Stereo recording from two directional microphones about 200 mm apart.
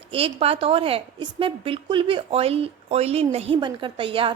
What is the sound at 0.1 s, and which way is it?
A woman's voice, 30° right (ahead or behind).